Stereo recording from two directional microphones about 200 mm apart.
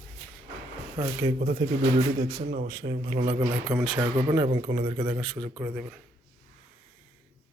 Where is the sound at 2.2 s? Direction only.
40° right (ahead or behind).